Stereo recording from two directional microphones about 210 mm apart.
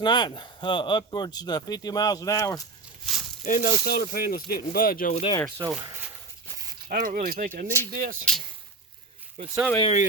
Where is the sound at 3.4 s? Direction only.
45° left (ahead or behind).